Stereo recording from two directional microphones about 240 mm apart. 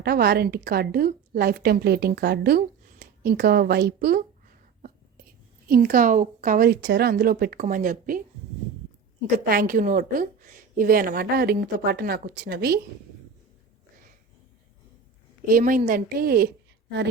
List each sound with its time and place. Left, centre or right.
0.0 s a woman's voice: right
5.6 s a woman's voice: right
9.5 s a woman's voice: right
15.4 s a woman's voice: right